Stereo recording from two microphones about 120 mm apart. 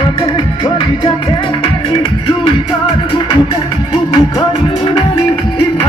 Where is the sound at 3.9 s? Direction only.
40° left (ahead or behind).